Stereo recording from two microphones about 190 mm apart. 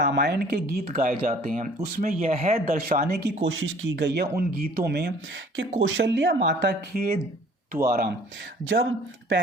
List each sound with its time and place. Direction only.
0.0 s speech: 60° right (ahead or behind); by 2.5 s 35° right (ahead or behind)
2.5 s speech: 50° right (ahead or behind)
3.4 s speech: 85° right; by 5.1 s 60° right (ahead or behind)
6.0 s speech: 70° right (ahead or behind); by 8.1 s 55° right (ahead or behind)
8.6 s speech: 90° right